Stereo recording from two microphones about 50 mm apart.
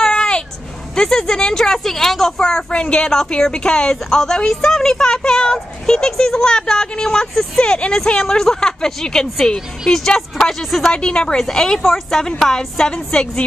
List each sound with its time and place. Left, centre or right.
0.0 s vehicle: centre
0.9 s a woman's voice: centre
10.9 s a woman's voice: centre